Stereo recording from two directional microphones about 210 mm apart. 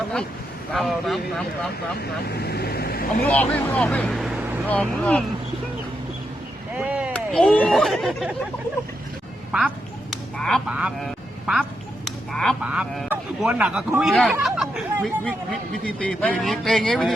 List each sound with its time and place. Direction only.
0.7 s a man's voice: centre (ahead or behind)
2.0 s vehicle: 50° left (ahead or behind)
3.2 s speech: 5° left (ahead or behind)
6.7 s a sound: 5° right (ahead or behind)
7.1 s a man's voice: 5° left (ahead or behind)
9.5 s a sound: 5° right (ahead or behind)
12.0 s a man's voice: centre (ahead or behind)